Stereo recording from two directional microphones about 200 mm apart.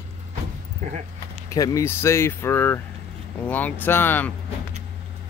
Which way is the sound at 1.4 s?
15° left (ahead or behind).